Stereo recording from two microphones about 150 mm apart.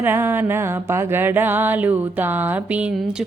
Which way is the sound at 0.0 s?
15° right (ahead or behind).